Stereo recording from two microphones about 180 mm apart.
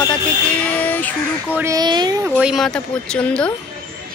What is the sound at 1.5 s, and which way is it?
Speech, 15° right (ahead or behind).